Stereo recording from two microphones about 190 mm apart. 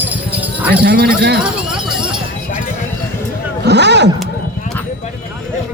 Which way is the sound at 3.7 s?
65° right (ahead or behind).